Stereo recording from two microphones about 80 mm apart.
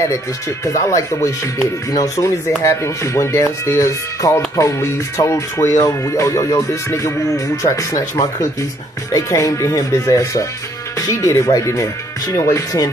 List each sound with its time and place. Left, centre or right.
0.7 s music: left